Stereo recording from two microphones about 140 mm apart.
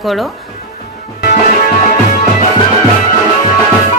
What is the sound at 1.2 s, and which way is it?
Music, 90° left.